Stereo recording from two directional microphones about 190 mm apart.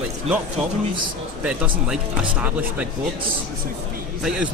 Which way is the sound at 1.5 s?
5° right (ahead or behind).